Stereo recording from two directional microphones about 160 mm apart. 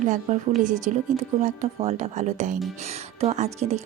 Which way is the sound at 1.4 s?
40° right (ahead or behind).